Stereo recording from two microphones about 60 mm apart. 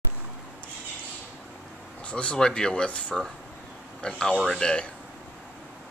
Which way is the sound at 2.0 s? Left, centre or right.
Centre.